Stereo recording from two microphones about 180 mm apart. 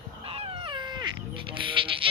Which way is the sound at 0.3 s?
30° right (ahead or behind).